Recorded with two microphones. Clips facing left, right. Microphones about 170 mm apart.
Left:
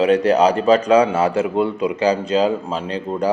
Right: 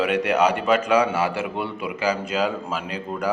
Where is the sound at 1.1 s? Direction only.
25° left (ahead or behind).